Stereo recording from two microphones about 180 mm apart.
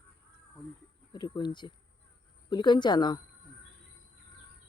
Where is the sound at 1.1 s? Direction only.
25° left (ahead or behind).